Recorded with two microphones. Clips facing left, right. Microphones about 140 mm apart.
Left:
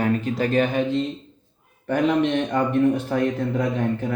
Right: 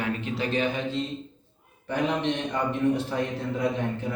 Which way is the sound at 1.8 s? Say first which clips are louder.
Left 6 dB; 55° left (ahead or behind).